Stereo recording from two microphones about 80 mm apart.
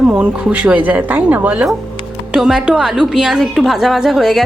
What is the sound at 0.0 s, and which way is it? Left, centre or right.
Speech, centre.